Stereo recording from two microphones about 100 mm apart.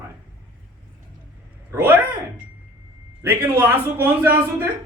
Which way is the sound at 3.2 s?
20° right (ahead or behind).